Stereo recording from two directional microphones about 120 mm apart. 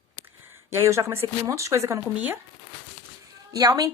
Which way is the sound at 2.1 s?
15° right (ahead or behind).